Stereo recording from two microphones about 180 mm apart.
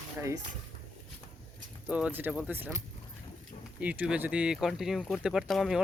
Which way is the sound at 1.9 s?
5° right (ahead or behind).